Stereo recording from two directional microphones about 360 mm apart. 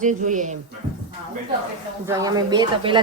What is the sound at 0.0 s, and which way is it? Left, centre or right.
Speech, centre.